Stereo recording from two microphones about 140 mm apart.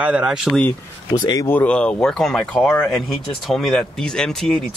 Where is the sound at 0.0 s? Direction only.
10° right (ahead or behind).